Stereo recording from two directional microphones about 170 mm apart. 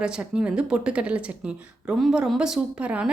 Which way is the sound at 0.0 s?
5° right (ahead or behind).